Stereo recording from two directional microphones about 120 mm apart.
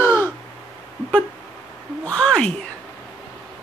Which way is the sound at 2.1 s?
10° left (ahead or behind).